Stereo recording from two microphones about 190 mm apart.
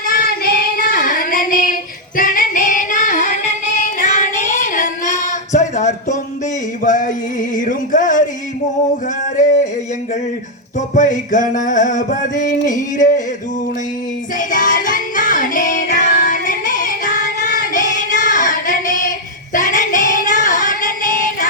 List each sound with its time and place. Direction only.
0.1 s child singing: 55° left (ahead or behind)
2.1 s female singing: 45° left (ahead or behind)
6.8 s male singing: 40° left (ahead or behind)
10.8 s music: 40° left (ahead or behind)
14.3 s music: 45° left (ahead or behind)
17.7 s child singing: 40° left (ahead or behind)
19.5 s female singing: 45° left (ahead or behind)